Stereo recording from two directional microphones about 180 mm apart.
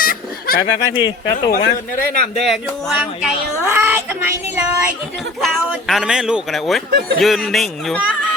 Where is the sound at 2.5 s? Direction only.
5° right (ahead or behind).